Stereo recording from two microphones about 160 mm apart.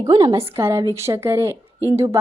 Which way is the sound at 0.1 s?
30° right (ahead or behind).